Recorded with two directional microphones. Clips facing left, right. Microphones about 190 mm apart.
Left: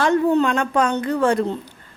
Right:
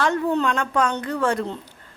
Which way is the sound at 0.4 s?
15° left (ahead or behind).